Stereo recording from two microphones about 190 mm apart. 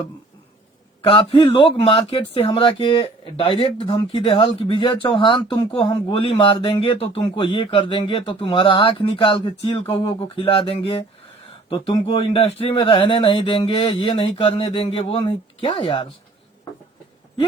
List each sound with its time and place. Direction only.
1.0 s speech: 30° left (ahead or behind)